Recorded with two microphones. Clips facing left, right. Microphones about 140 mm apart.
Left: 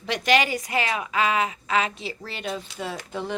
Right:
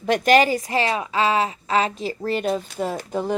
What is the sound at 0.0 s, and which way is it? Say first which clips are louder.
Speech: right 6 dB; 45° right (ahead or behind).